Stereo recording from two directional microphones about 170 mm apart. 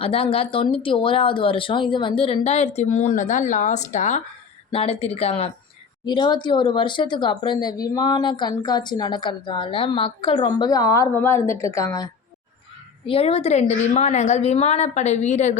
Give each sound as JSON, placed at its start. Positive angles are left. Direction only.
{"t": 0.0, "sound": "speech", "side_deg": 35}
{"t": 13.1, "sound": "speech", "side_deg": 35}